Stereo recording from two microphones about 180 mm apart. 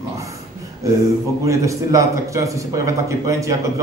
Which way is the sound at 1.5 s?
15° right (ahead or behind).